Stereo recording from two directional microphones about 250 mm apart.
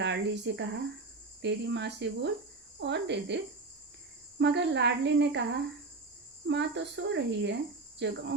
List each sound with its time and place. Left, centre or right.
0.0 s speech: right